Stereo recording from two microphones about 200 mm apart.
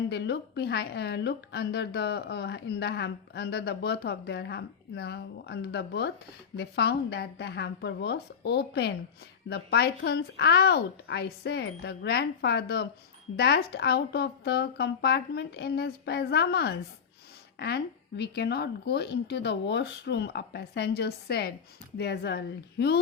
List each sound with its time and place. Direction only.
0.1 s a woman's voice: 55° left (ahead or behind)